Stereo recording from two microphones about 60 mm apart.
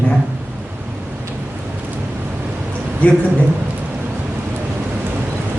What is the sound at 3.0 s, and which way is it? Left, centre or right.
Speech, left.